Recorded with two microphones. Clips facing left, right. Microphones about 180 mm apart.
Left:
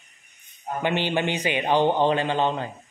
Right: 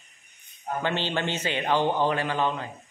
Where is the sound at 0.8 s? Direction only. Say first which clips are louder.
Left 5 dB; 15° left (ahead or behind).